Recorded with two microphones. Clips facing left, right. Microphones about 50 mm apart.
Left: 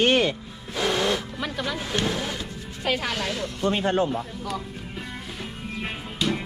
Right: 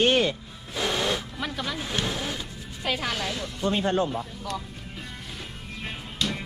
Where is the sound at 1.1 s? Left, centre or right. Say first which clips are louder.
Left 2 dB; centre.